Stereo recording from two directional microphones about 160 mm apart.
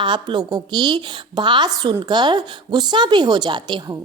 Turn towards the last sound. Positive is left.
turn(degrees=-25)  # may be behind; listen again after turning